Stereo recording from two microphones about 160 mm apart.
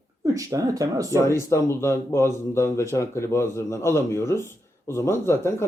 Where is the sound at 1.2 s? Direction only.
15° left (ahead or behind).